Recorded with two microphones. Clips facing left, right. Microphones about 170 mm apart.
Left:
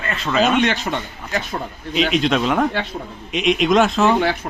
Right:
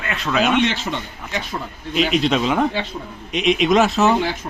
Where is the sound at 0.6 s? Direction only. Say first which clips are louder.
Left 1 dB; 50° left (ahead or behind).